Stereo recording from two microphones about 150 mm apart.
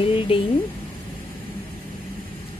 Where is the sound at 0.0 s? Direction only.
35° left (ahead or behind).